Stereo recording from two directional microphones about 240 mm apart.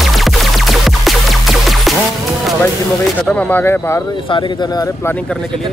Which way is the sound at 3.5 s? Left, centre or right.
Centre.